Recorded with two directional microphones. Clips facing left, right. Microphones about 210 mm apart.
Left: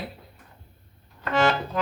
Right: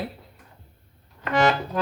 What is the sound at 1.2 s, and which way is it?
Accordion, 15° right (ahead or behind).